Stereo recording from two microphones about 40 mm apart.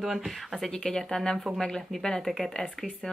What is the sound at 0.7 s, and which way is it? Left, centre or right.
Speech, centre.